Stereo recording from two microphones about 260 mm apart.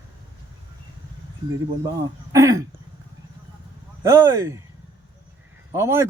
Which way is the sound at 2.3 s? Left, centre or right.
Centre.